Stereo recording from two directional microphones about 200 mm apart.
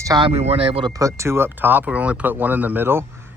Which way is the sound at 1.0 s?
15° right (ahead or behind).